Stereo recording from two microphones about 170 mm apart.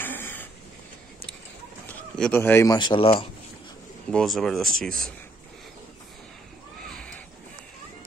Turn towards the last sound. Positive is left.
turn(degrees=5)  # may be behind; listen again after turning